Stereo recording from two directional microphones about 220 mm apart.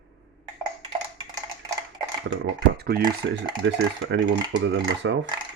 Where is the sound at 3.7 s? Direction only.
50° right (ahead or behind).